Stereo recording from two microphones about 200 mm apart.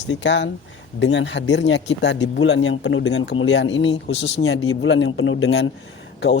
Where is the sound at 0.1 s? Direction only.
65° left (ahead or behind).